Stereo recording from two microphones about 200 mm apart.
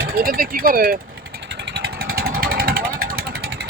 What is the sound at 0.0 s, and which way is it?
Speech, 45° right (ahead or behind).